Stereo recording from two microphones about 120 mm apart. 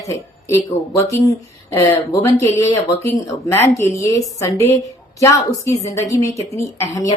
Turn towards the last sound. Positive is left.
turn(degrees=25)  # may be behind; listen again after turning